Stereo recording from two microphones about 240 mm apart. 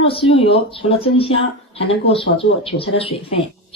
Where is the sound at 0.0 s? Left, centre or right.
Left.